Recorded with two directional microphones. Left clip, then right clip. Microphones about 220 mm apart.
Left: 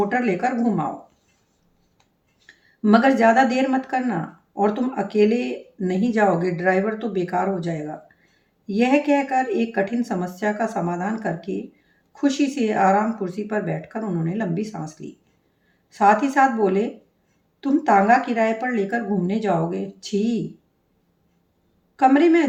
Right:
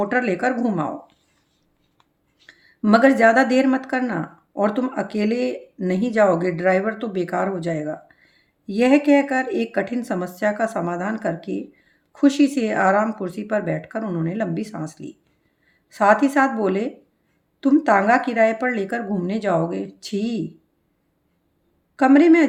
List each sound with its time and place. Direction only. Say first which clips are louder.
0.0 s speech: right 1 dB; 50° right (ahead or behind)
2.5 s speech: right 1 dB; 50° right (ahead or behind)
21.9 s speech: right 2 dB; 50° right (ahead or behind)